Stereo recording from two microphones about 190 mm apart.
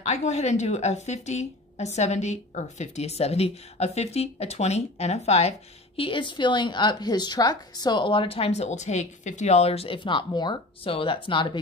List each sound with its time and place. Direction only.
0.0 s a woman's voice: 35° left (ahead or behind)